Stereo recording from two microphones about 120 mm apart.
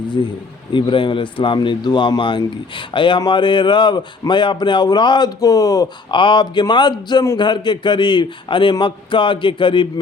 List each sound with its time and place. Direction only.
0.7 s speech: 45° left (ahead or behind)